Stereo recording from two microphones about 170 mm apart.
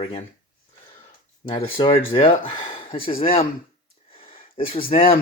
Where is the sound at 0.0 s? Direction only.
35° left (ahead or behind).